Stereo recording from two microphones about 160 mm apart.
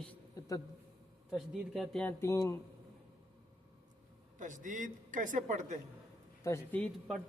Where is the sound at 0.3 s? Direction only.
20° left (ahead or behind).